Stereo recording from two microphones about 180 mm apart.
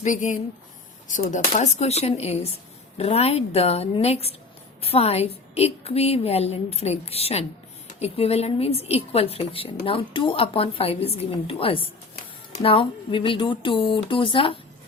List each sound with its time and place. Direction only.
0.0 s a woman's voice: 45° left (ahead or behind)